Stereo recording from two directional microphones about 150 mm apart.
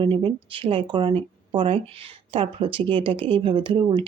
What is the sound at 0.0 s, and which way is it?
Speech, 35° right (ahead or behind).